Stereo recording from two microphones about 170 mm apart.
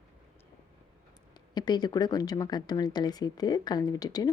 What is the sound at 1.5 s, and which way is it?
Speech, 25° left (ahead or behind).